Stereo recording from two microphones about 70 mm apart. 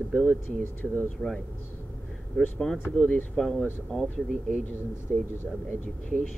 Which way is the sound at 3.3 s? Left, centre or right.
Centre.